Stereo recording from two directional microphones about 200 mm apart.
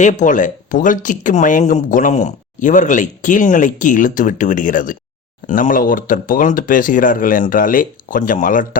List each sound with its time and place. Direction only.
0.0 s speech: 40° left (ahead or behind)